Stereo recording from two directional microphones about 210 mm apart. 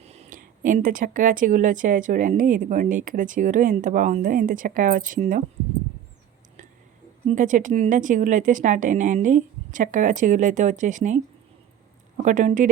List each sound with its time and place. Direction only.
0.0 s speech: 30° right (ahead or behind)
7.3 s a woman's voice: 35° right (ahead or behind)